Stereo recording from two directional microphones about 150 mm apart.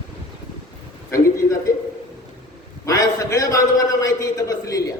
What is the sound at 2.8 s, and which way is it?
A man's voice, 25° left (ahead or behind).